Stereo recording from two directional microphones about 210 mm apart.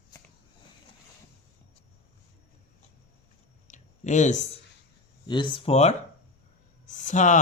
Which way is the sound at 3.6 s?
35° left (ahead or behind).